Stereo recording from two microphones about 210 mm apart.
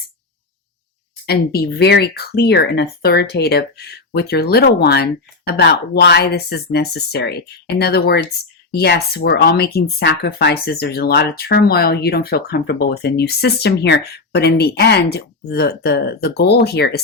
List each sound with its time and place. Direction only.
1.3 s speech: 50° left (ahead or behind)